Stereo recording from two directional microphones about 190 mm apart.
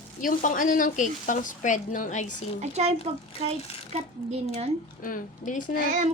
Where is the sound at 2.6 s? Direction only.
35° right (ahead or behind).